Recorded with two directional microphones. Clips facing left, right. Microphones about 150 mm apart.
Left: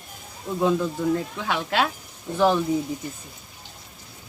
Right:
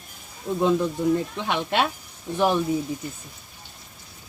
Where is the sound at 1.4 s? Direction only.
20° right (ahead or behind).